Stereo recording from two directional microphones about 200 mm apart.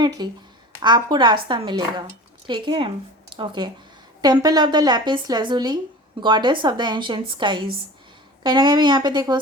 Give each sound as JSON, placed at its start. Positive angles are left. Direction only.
{"t": 0.0, "sound": "speech", "side_deg": -20}